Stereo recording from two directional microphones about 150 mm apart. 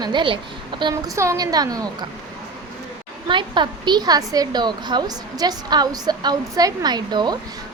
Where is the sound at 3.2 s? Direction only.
30° right (ahead or behind).